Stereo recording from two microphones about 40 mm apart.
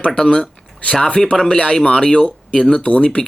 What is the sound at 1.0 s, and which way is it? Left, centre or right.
Speech, centre.